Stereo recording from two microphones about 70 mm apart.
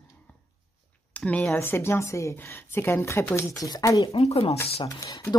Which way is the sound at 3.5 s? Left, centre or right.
Left.